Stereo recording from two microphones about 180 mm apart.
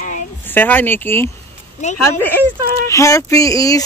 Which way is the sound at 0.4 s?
10° left (ahead or behind).